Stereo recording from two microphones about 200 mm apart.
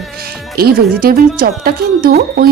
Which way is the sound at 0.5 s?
50° right (ahead or behind).